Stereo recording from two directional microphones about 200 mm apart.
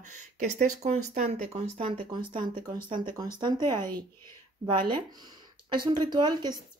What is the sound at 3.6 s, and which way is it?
Speech, 15° left (ahead or behind).